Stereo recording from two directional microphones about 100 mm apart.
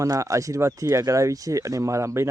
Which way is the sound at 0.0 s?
30° right (ahead or behind).